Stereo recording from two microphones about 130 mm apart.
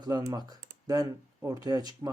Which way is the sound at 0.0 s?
30° right (ahead or behind).